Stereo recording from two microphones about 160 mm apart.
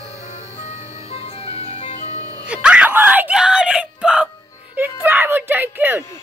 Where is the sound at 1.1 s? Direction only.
35° left (ahead or behind).